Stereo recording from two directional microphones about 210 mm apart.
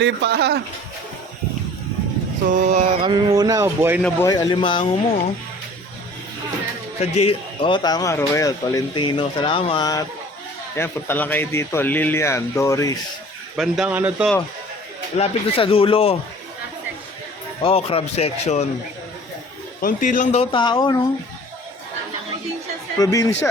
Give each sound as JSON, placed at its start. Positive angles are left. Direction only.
{"t": 0.0, "sound": "speech", "side_deg": -55}
{"t": 2.5, "sound": "speech", "side_deg": -35}
{"t": 4.0, "sound": "a man's voice", "side_deg": 15}
{"t": 7.0, "sound": "a man's voice", "side_deg": 30}
{"t": 13.6, "sound": "speech", "side_deg": -5}
{"t": 15.2, "sound": "a man's voice", "side_deg": 25}
{"t": 17.6, "sound": "a man's voice", "side_deg": 25}
{"t": 19.8, "sound": "a man's voice", "side_deg": 40}
{"t": 23.0, "sound": "speech", "side_deg": 15}